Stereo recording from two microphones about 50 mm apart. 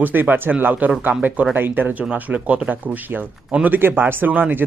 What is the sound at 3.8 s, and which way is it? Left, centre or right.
Speech, right.